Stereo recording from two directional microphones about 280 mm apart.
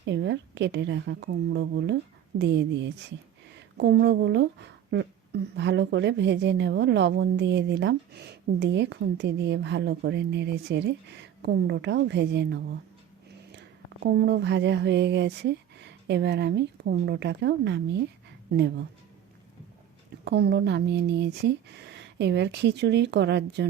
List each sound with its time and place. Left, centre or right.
0.0 s speech: right
3.8 s speech: right
14.0 s speech: right
20.2 s speech: right